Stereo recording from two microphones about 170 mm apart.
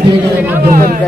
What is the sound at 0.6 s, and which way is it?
Speech, 55° right (ahead or behind).